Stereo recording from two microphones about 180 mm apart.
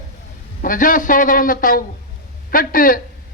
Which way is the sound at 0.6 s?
50° left (ahead or behind).